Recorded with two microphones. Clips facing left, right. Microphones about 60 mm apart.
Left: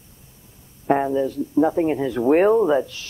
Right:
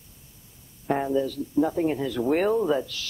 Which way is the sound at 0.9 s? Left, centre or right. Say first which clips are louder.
Left 5 dB; left.